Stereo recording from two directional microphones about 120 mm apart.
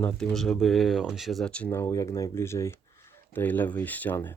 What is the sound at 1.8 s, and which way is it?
Speech, 25° left (ahead or behind).